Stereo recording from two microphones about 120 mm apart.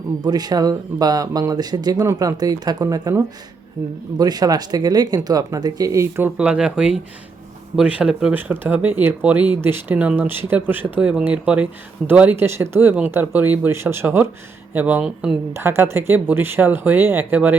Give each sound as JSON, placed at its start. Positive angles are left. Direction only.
{"t": 0.2, "sound": "speech", "side_deg": -35}
{"t": 6.3, "sound": "speech", "side_deg": -10}
{"t": 15.5, "sound": "speech", "side_deg": -20}